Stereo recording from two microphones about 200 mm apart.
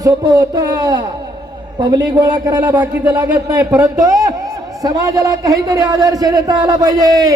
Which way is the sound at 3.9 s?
20° right (ahead or behind).